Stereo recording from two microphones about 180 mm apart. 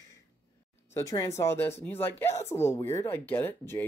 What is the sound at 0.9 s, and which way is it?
Speech, 20° left (ahead or behind).